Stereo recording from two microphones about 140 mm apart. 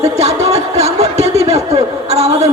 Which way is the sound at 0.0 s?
50° right (ahead or behind).